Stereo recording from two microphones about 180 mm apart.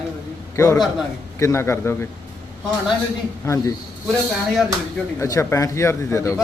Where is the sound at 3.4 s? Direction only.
15° left (ahead or behind).